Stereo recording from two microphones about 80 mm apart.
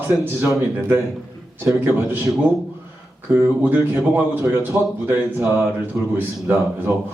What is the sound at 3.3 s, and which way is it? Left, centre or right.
Speech, right.